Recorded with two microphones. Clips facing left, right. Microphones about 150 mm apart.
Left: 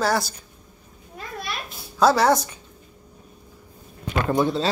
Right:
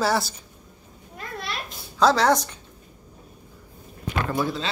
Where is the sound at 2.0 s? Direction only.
5° left (ahead or behind).